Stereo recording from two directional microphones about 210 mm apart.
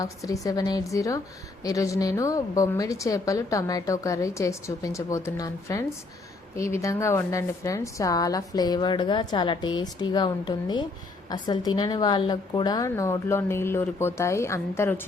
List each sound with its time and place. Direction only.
0.0 s a woman's voice: 15° left (ahead or behind)